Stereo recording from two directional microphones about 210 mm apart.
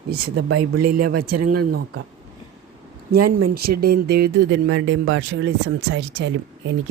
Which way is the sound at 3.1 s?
45° right (ahead or behind).